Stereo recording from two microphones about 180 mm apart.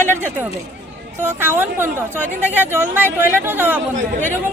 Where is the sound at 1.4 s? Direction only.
10° right (ahead or behind).